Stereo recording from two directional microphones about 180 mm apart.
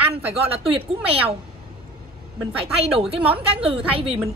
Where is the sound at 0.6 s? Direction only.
30° right (ahead or behind).